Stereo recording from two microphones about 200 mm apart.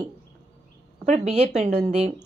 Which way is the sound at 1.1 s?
35° right (ahead or behind).